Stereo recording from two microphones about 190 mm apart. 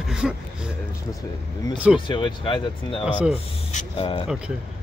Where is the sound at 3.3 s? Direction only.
40° left (ahead or behind).